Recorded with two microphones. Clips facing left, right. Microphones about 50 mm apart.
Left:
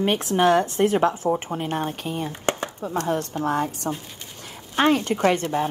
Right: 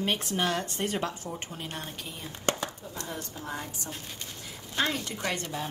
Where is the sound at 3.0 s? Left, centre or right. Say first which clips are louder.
Left 13 dB; left.